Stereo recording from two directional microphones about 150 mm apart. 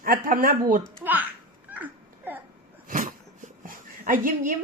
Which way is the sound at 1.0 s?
10° right (ahead or behind).